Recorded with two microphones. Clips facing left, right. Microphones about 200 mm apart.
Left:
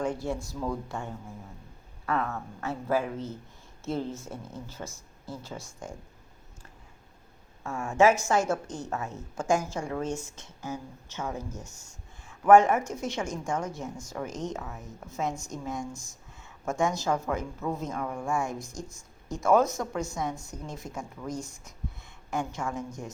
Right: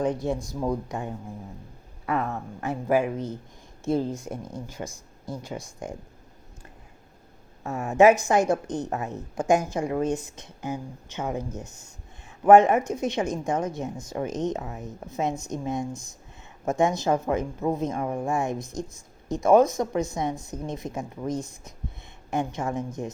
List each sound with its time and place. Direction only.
0.0 s a woman's voice: 20° right (ahead or behind)
7.6 s a woman's voice: 20° right (ahead or behind)